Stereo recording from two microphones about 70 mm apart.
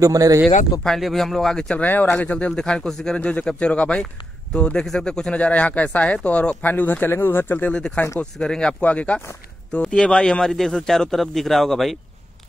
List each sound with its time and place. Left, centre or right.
0.0 s speech: right
0.8 s speech: centre
1.8 s a man's voice: left
8.2 s a man's voice: centre